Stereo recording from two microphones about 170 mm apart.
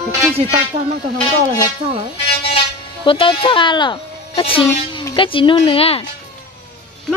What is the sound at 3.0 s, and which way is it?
Speech, 30° left (ahead or behind).